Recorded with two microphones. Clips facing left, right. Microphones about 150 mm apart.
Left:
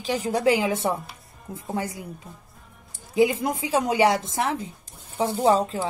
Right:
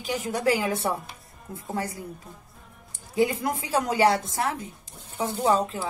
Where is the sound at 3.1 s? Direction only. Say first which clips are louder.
Left 3 dB; 20° left (ahead or behind).